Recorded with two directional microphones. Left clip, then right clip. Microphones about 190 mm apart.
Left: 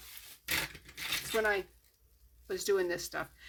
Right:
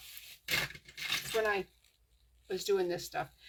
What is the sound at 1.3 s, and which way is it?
Speech, 40° left (ahead or behind).